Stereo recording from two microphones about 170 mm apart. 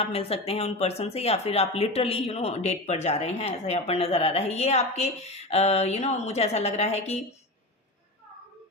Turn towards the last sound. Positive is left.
turn(degrees=40)  # may be behind; listen again after turning